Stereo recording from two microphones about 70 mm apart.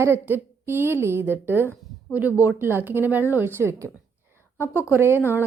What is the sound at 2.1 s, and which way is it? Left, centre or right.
A woman's voice, right.